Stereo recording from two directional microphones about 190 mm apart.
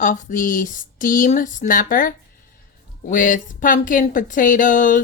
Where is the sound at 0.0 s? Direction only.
40° left (ahead or behind).